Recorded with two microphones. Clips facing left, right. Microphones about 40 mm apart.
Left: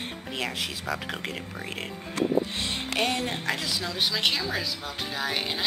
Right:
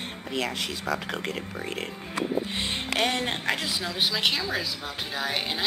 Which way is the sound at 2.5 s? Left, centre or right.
Right.